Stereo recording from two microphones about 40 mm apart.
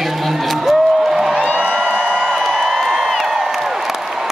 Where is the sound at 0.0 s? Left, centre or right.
Centre; by 2.2 s right.